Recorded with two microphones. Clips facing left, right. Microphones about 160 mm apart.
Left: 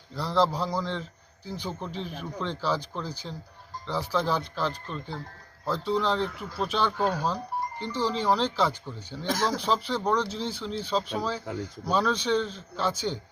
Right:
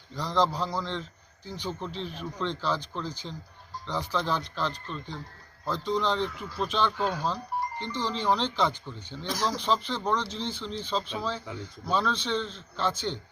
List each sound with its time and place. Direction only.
0.2 s speech: 5° left (ahead or behind)
6.9 s speech: 40° left (ahead or behind)
7.8 s speech: 10° left (ahead or behind)
9.2 s speech: 50° left (ahead or behind)
9.6 s speech: 5° left (ahead or behind)